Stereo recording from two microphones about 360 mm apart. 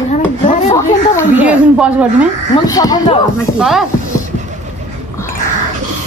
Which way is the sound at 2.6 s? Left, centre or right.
Centre.